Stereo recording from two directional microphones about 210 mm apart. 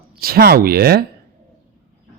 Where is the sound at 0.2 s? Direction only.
45° right (ahead or behind).